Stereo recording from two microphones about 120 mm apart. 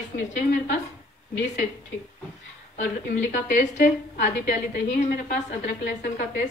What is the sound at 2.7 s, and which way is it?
A woman's voice, 90° left.